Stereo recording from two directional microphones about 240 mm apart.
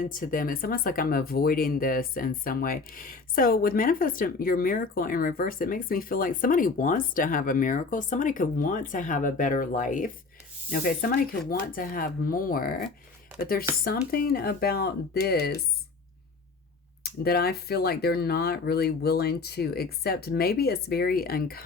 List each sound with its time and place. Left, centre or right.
0.0 s speech: left
14.1 s speech: left
17.0 s speech: left